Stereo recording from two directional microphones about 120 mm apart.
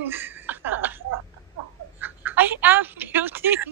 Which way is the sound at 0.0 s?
20° right (ahead or behind).